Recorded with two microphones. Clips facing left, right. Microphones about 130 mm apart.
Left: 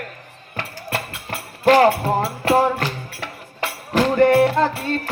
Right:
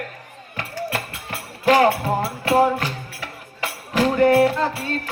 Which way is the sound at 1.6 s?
40° left (ahead or behind).